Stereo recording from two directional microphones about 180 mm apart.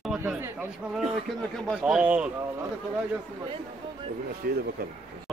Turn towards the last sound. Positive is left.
turn(degrees=-55)  # may be behind; listen again after turning